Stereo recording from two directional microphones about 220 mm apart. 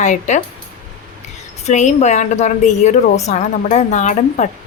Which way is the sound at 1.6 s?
35° left (ahead or behind).